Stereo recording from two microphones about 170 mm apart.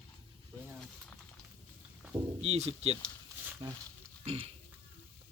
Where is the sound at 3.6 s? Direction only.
25° right (ahead or behind).